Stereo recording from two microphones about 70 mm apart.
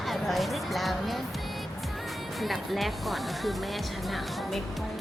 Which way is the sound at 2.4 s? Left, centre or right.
Centre.